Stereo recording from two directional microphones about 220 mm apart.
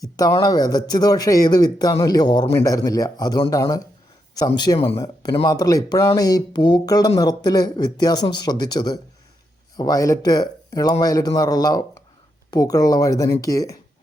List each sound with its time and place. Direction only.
0.0 s speech: 15° left (ahead or behind)